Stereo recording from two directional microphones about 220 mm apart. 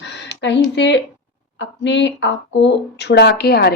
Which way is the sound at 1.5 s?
55° left (ahead or behind).